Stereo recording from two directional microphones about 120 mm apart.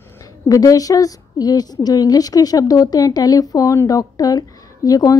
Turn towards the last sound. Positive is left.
turn(degrees=30)  # may be behind; listen again after turning